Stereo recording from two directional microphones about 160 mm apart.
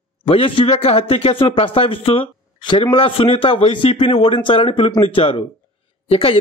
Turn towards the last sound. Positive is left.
turn(degrees=35)  # may be behind; listen again after turning